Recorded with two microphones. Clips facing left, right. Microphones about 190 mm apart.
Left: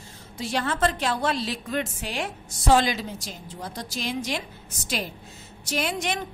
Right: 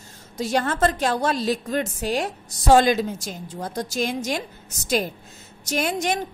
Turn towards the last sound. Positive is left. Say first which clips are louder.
# right 4 dB
turn(degrees=-40)  # may be behind; listen again after turning